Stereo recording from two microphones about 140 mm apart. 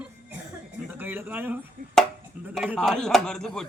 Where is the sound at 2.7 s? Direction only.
5° left (ahead or behind).